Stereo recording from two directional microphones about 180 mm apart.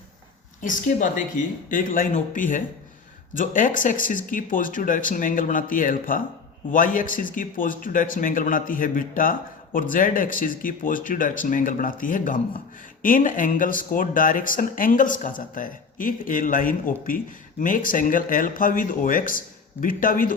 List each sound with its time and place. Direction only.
0.6 s speech: 45° left (ahead or behind)